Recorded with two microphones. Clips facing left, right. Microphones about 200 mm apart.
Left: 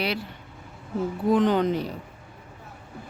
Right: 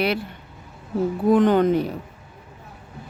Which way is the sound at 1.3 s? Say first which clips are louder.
Right 4 dB; 55° right (ahead or behind).